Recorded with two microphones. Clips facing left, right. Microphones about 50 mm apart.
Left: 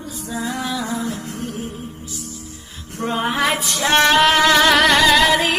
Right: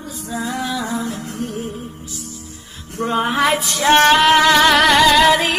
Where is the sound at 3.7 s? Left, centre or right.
Right.